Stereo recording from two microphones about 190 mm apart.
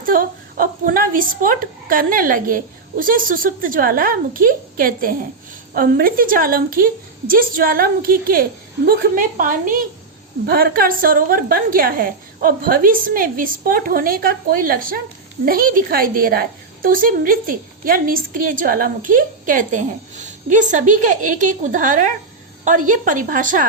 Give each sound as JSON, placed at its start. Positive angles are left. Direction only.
{"t": 0.0, "sound": "a woman's voice", "side_deg": -45}